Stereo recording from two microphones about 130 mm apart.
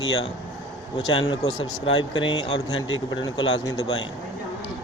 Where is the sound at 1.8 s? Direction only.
40° left (ahead or behind).